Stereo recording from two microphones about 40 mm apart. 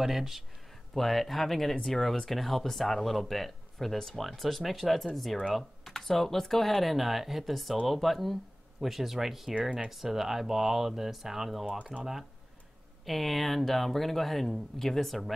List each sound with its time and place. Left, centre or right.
0.0 s speech: centre
5.5 s computer keyboard: centre
5.9 s speech: centre
9.6 s speech: right
9.8 s speech: centre